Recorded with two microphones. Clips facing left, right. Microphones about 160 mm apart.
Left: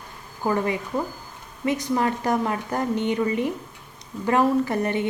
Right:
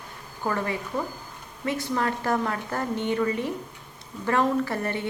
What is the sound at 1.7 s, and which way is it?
A woman's voice, 15° left (ahead or behind).